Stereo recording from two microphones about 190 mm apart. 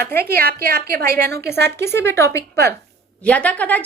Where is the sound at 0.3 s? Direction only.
50° right (ahead or behind).